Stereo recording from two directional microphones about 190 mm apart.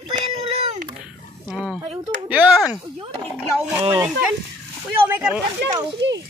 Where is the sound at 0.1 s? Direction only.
30° right (ahead or behind).